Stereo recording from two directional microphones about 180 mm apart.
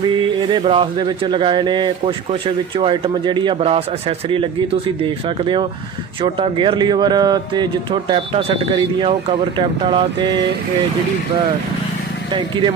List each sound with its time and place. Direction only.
0.2 s speech: 25° right (ahead or behind)
12.3 s speech: 25° right (ahead or behind)